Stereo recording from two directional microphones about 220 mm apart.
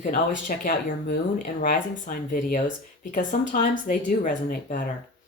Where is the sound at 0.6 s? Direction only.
40° left (ahead or behind).